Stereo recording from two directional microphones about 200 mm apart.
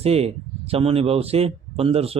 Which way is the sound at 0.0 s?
30° right (ahead or behind).